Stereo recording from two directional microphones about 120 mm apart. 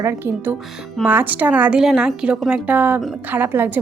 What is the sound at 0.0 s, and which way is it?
A woman's voice, 20° right (ahead or behind).